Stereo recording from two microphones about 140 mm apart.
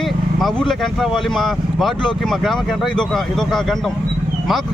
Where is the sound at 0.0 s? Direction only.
Centre (ahead or behind).